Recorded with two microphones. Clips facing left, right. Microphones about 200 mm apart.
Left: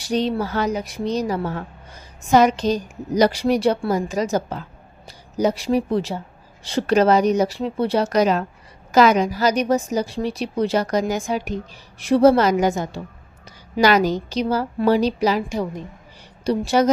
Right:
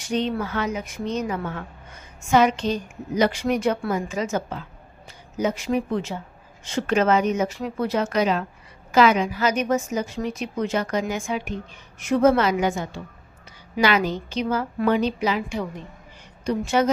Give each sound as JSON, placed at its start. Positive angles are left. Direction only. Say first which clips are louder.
{"t": 0.0, "sound": "a woman's voice", "louder": "left 3 dB", "side_deg": 35}